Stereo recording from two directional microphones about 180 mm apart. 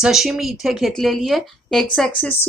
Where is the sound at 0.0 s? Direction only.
Centre (ahead or behind).